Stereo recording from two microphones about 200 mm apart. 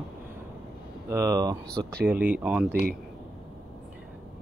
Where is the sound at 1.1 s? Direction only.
15° right (ahead or behind).